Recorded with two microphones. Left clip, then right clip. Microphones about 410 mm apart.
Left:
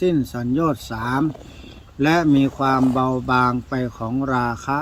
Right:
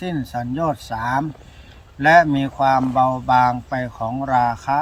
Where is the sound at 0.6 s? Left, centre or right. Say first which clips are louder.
Right 2 dB; right.